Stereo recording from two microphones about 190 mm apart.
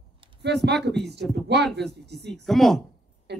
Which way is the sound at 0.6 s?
65° right (ahead or behind).